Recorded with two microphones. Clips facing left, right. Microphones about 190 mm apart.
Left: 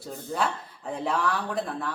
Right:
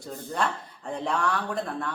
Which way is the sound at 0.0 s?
5° left (ahead or behind).